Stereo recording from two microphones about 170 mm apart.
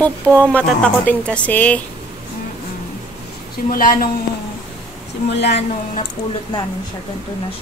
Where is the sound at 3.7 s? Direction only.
55° left (ahead or behind).